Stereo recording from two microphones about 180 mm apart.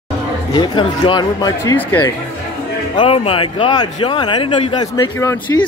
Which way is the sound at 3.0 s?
30° left (ahead or behind).